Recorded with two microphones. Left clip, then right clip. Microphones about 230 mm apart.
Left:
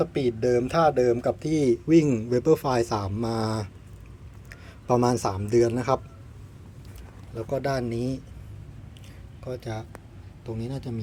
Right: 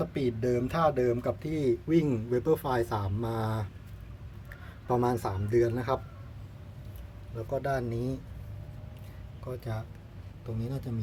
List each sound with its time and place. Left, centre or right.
0.0 s speech: centre
4.9 s speech: centre
7.5 s speech: centre
9.5 s speech: centre